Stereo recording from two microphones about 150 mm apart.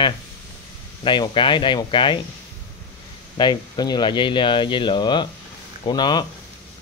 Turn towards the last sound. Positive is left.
turn(degrees=30)  # may be behind; listen again after turning